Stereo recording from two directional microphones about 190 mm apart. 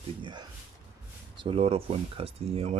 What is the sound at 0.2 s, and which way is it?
Speech, 25° right (ahead or behind).